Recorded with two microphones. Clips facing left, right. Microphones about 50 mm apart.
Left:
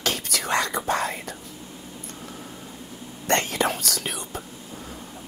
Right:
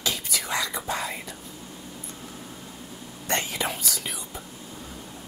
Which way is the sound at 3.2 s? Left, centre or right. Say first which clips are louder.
Left 5 dB; left.